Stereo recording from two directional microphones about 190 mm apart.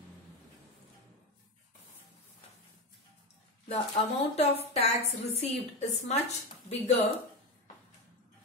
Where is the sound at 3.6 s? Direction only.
30° left (ahead or behind).